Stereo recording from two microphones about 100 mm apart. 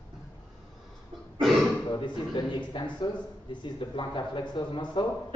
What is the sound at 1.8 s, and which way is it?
A man's voice, 50° left (ahead or behind).